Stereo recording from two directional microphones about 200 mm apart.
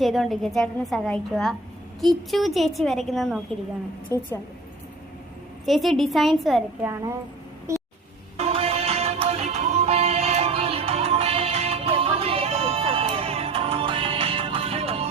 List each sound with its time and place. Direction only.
0.0 s a woman's voice: centre (ahead or behind)
4.1 s a woman's voice: 15° right (ahead or behind)
5.6 s a woman's voice: centre (ahead or behind)
7.7 s vehicle: 15° right (ahead or behind)
8.4 s music: 30° right (ahead or behind)